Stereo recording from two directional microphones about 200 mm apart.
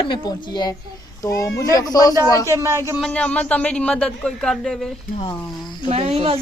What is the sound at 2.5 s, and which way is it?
Speech, 15° right (ahead or behind).